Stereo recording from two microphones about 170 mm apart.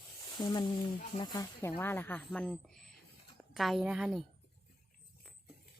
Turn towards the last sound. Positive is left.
turn(degrees=-5)  # may be behind; listen again after turning